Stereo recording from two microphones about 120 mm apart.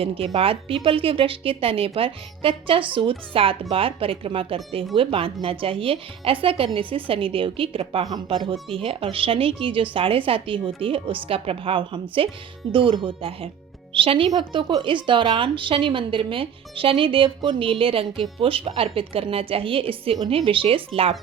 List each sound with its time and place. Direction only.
0.0 s a woman's voice: 50° right (ahead or behind)